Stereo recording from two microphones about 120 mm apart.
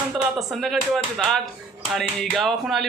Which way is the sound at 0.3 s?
Centre (ahead or behind).